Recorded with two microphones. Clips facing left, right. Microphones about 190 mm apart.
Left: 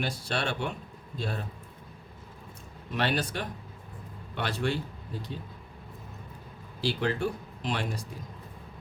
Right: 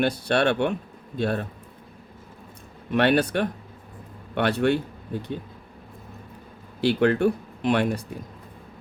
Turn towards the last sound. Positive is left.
turn(degrees=-60)  # may be behind; listen again after turning